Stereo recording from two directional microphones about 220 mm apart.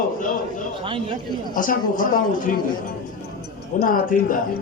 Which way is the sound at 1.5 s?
40° left (ahead or behind).